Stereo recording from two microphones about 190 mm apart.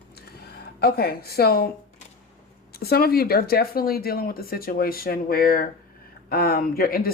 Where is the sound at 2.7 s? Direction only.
55° left (ahead or behind).